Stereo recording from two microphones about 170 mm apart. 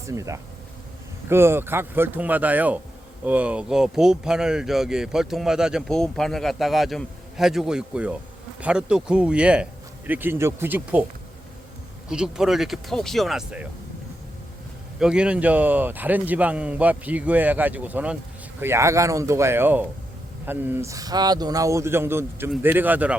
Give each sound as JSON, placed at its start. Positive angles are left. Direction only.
{"t": 0.1, "sound": "a man's voice", "side_deg": -20}
{"t": 12.0, "sound": "speech", "side_deg": -5}
{"t": 14.9, "sound": "a man's voice", "side_deg": -5}